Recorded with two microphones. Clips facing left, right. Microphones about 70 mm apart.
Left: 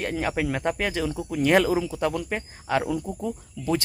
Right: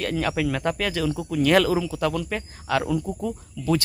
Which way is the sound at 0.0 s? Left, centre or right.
Centre.